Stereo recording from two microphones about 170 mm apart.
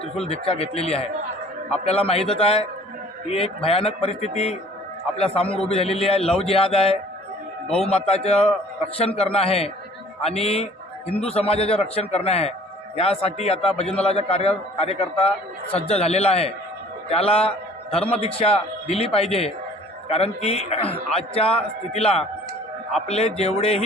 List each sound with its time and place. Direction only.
0.0 s a man's voice: 35° left (ahead or behind)